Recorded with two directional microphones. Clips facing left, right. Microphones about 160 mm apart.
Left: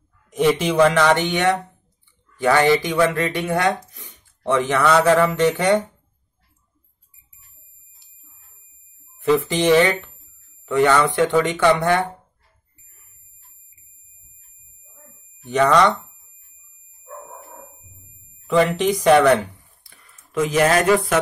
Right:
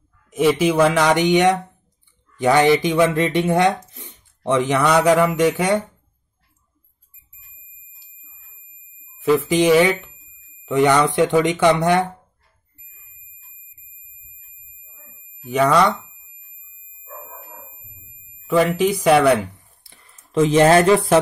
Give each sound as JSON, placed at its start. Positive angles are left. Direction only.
{"t": 0.3, "sound": "speech", "side_deg": -5}
{"t": 3.9, "sound": "a sound", "side_deg": -20}
{"t": 4.8, "sound": "speech", "side_deg": -15}
{"t": 9.2, "sound": "speech", "side_deg": -5}
{"t": 15.4, "sound": "speech", "side_deg": -10}
{"t": 18.5, "sound": "speech", "side_deg": -5}
{"t": 19.8, "sound": "a sound", "side_deg": -25}